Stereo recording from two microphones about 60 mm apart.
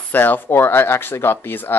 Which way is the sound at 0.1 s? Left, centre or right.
Left.